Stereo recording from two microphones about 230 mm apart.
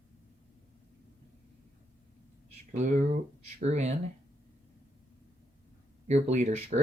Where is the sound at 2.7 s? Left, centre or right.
Right.